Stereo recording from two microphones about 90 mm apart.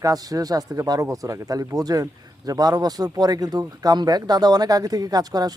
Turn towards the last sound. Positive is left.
turn(degrees=-45)  # may be behind; listen again after turning